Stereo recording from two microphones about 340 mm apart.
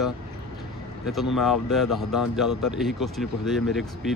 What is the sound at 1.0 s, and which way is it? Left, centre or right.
Speech, centre.